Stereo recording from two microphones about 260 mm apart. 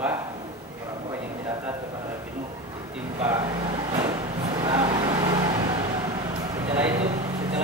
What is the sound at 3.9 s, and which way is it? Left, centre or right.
Vehicle, centre.